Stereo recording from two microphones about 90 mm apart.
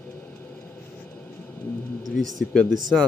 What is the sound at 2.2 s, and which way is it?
Speech, centre (ahead or behind).